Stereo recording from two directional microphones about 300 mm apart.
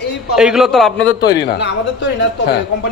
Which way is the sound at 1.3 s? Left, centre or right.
Left.